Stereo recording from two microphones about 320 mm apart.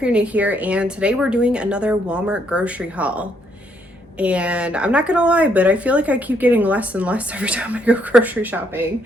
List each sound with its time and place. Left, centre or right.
0.0 s a woman's voice: centre